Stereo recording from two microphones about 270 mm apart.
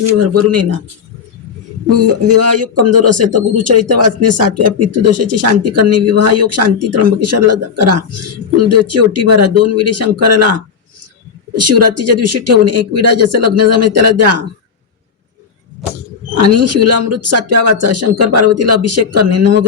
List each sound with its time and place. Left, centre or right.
0.2 s speech: right
2.0 s speech: right
16.4 s speech: right